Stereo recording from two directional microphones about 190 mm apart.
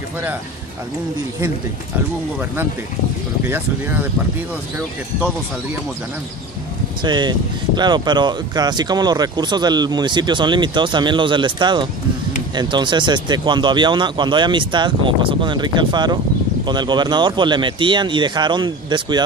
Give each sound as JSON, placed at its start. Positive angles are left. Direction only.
{"t": 3.4, "sound": "speech", "side_deg": -10}
{"t": 7.0, "sound": "speech", "side_deg": -25}